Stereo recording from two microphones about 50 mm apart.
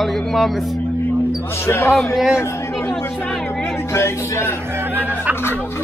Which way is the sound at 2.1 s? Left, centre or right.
Centre.